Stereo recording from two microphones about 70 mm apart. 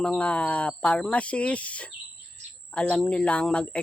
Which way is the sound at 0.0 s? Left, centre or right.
Centre.